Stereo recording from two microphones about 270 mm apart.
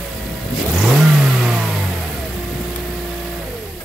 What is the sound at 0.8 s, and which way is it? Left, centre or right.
Vehicle, centre.